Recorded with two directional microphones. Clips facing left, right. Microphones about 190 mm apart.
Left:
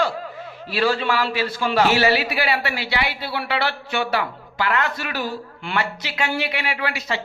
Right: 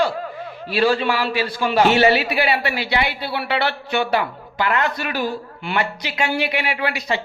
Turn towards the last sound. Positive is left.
turn(degrees=-15)  # may be behind; listen again after turning